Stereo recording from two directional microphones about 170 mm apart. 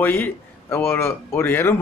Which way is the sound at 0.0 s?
10° left (ahead or behind).